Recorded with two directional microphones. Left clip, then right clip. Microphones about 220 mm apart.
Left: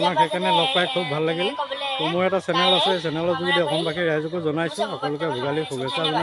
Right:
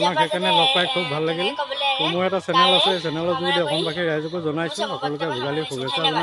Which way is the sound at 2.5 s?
45° right (ahead or behind).